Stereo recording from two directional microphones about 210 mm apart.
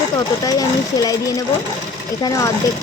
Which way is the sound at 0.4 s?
15° left (ahead or behind).